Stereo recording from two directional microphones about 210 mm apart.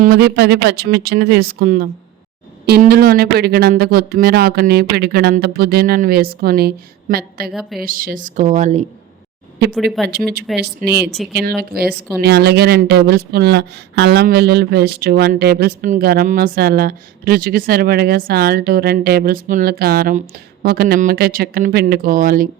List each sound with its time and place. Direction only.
0.0 s speech: 45° right (ahead or behind)
7.5 s a woman's voice: centre (ahead or behind)
7.8 s a woman's voice: 40° right (ahead or behind)
10.1 s speech: 50° right (ahead or behind)
11.0 s a woman's voice: centre (ahead or behind)
11.7 s speech: 45° right (ahead or behind)